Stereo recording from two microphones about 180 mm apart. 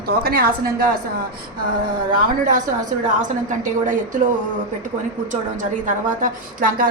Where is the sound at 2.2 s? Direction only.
45° right (ahead or behind).